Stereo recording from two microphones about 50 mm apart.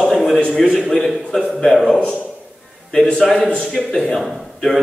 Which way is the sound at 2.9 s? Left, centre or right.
Centre.